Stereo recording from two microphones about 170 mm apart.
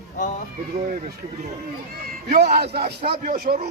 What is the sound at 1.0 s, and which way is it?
Speech, 45° right (ahead or behind).